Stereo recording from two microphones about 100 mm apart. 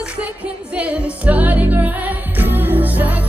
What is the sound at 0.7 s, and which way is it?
Music, 15° right (ahead or behind).